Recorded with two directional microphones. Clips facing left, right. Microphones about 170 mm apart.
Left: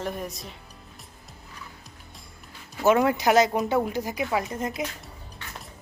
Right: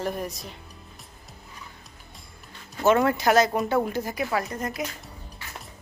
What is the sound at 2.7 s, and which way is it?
Speech, 5° left (ahead or behind).